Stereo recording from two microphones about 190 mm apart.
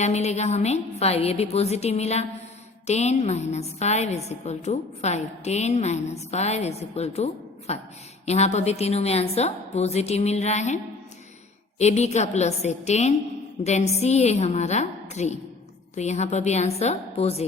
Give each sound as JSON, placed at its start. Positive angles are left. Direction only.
{"t": 0.0, "sound": "a woman's voice", "side_deg": 35}
{"t": 11.8, "sound": "a woman's voice", "side_deg": 35}